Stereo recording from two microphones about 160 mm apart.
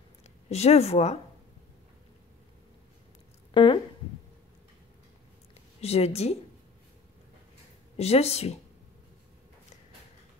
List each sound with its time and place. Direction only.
0.5 s speech: 40° left (ahead or behind)
3.5 s speech: 30° left (ahead or behind)
5.8 s speech: 40° left (ahead or behind)
8.0 s speech: 40° left (ahead or behind)